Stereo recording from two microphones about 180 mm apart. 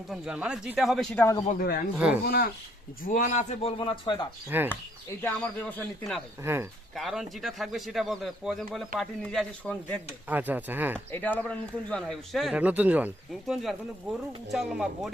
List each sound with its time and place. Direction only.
0.1 s speech: 5° right (ahead or behind)
1.5 s speech: 55° left (ahead or behind)
3.0 s a man's voice: 45° left (ahead or behind); by 4.3 s 25° left (ahead or behind)
4.4 s speech: 10° right (ahead or behind)
5.2 s speech: 5° left (ahead or behind)
6.4 s speech: 15° right (ahead or behind)
6.9 s speech: centre (ahead or behind)
10.2 s speech: 10° right (ahead or behind)
11.1 s speech: 10° left (ahead or behind)